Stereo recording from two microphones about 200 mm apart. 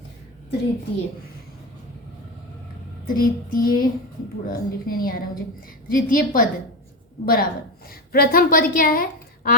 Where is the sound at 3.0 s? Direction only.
45° left (ahead or behind).